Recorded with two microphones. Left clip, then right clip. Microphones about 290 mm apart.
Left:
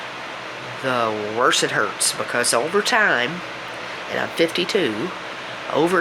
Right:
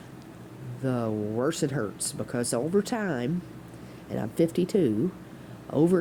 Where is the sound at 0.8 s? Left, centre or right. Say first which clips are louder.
Left 9 dB; right.